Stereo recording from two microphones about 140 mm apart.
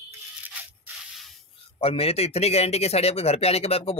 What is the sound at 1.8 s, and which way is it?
Speech, 45° left (ahead or behind).